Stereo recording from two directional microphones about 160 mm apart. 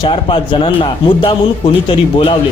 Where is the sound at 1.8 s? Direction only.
35° left (ahead or behind).